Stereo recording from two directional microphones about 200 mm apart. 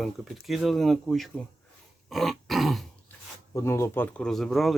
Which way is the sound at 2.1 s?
Centre (ahead or behind).